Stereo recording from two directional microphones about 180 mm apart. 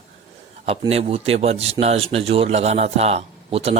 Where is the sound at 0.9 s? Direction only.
35° right (ahead or behind).